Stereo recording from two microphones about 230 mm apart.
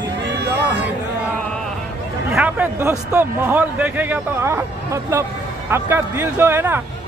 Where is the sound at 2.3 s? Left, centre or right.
Centre.